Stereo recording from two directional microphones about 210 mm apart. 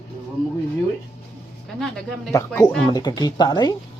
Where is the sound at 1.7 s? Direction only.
Centre (ahead or behind).